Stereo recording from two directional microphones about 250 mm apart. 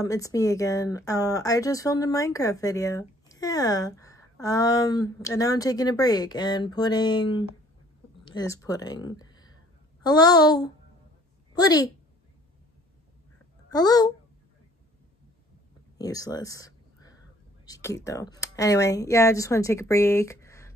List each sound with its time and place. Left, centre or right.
0.0 s a woman's voice: centre
13.7 s speech: centre
16.0 s a sound: centre
18.0 s speech: centre